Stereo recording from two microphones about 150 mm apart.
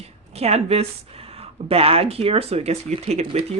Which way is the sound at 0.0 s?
45° right (ahead or behind).